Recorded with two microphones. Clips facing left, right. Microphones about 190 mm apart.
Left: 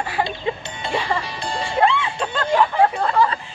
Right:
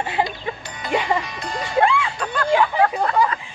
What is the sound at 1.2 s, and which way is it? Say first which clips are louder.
Music: left 2 dB; 30° left (ahead or behind).